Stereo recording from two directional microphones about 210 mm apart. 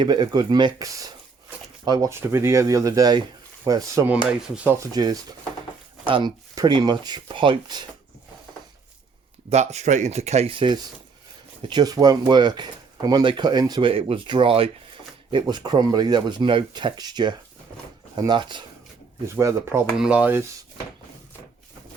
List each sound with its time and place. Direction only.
0.0 s speech: 20° right (ahead or behind)
4.3 s rub: 5° right (ahead or behind)
4.8 s speech: 20° right (ahead or behind)
9.5 s speech: 30° right (ahead or behind); by 20.4 s 5° right (ahead or behind)